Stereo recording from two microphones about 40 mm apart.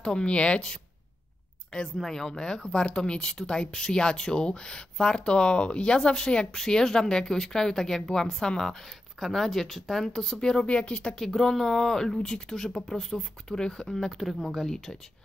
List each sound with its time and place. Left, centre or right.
0.0 s speech: left
2.0 s speech: centre
10.7 s speech: left
11.1 s speech: centre